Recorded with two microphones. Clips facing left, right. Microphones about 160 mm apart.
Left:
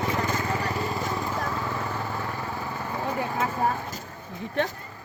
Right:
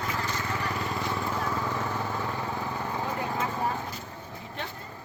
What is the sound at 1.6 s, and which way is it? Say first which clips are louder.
Vehicle: even; 10° left (ahead or behind).